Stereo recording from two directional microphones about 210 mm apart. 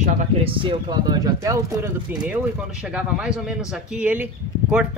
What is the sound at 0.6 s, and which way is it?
Speech, 20° right (ahead or behind).